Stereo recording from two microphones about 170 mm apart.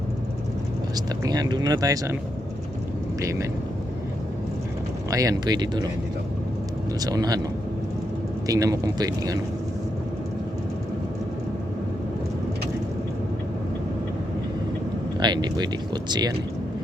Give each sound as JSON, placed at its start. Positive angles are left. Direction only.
{"t": 0.9, "sound": "speech", "side_deg": -20}
{"t": 3.2, "sound": "speech", "side_deg": -15}
{"t": 5.1, "sound": "speech", "side_deg": -20}
{"t": 7.0, "sound": "speech", "side_deg": -20}
{"t": 8.4, "sound": "speech", "side_deg": -20}
{"t": 15.2, "sound": "speech", "side_deg": -25}